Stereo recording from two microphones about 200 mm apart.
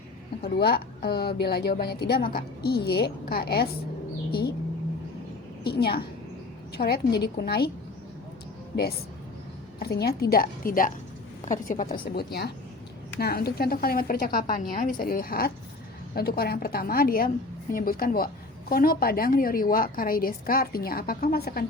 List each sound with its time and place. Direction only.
0.4 s a woman's voice: 50° left (ahead or behind)
5.6 s a woman's voice: 50° left (ahead or behind)
9.8 s a woman's voice: 50° left (ahead or behind)